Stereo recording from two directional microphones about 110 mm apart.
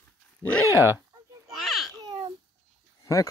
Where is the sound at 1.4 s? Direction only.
Centre (ahead or behind).